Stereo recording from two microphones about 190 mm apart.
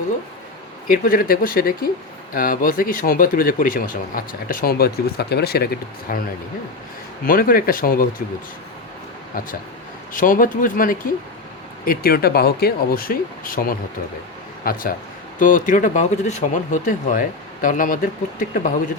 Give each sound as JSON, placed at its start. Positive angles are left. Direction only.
{"t": 0.9, "sound": "speech", "side_deg": 50}
{"t": 7.3, "sound": "speech", "side_deg": 50}
{"t": 10.1, "sound": "a man's voice", "side_deg": 45}